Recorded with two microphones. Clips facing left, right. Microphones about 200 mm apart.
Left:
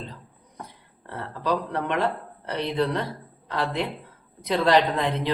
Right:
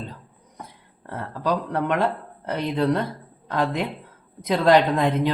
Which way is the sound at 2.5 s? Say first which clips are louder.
Right 3 dB; 45° right (ahead or behind).